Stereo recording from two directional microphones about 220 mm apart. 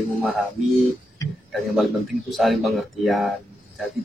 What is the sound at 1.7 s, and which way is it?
Speech, centre (ahead or behind).